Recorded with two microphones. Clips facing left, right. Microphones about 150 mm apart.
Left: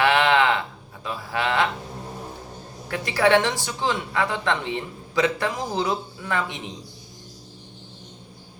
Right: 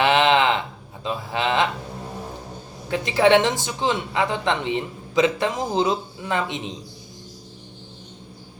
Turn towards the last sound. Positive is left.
turn(degrees=-20)  # may be behind; listen again after turning